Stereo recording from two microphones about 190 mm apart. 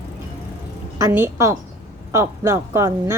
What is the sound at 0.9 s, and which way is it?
A woman's voice, 15° right (ahead or behind).